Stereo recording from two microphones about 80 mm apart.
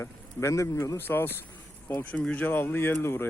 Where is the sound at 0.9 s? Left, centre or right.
Left.